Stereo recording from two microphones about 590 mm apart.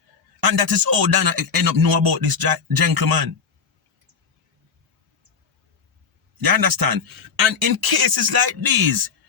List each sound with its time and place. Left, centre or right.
0.3 s a man's voice: right
6.4 s a man's voice: right